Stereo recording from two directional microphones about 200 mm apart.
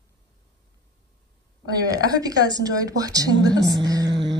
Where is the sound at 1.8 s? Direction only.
20° right (ahead or behind).